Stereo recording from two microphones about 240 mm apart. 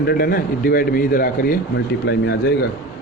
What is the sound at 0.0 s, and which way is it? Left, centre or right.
A man's voice, left.